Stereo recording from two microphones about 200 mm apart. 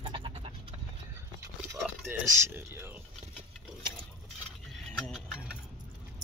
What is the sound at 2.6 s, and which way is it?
Speech, 10° right (ahead or behind).